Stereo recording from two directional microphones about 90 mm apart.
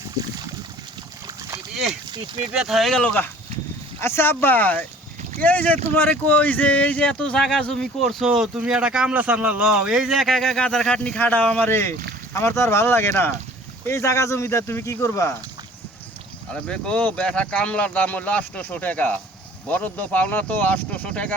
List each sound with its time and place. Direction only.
1.4 s boat: 35° right (ahead or behind)
1.7 s speech: centre (ahead or behind)
2.1 s speech: 65° right (ahead or behind)
2.5 s speech: 5° right (ahead or behind)
3.0 s speech: 15° left (ahead or behind)
4.0 s speech: 30° left (ahead or behind)
16.5 s speech: 10° left (ahead or behind)